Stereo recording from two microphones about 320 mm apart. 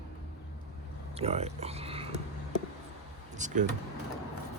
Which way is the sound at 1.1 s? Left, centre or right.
Centre.